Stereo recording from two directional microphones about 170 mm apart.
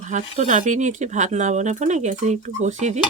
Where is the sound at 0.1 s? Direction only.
45° right (ahead or behind).